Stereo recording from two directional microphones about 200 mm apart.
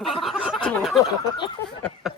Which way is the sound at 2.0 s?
Centre (ahead or behind).